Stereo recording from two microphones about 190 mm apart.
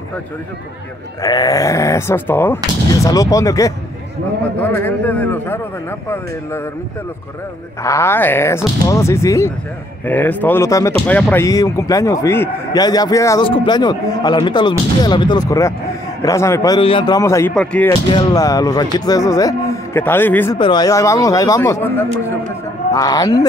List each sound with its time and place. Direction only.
1.2 s speech: 20° left (ahead or behind)
7.8 s speech: 15° left (ahead or behind)
18.1 s speech: 20° left (ahead or behind)
20.5 s speech: 25° left (ahead or behind)